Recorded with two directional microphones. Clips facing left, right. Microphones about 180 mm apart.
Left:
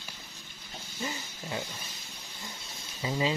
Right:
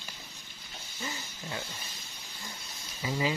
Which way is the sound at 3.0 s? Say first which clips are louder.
Left 1 dB; 25° left (ahead or behind).